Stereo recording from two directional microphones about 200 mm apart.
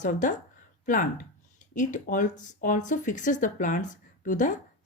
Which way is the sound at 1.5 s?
40° left (ahead or behind).